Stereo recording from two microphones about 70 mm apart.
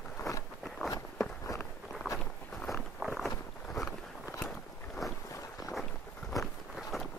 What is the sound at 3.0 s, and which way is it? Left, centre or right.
Walk, centre.